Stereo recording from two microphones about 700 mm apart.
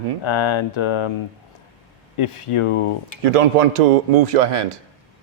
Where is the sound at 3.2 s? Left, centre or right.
Right.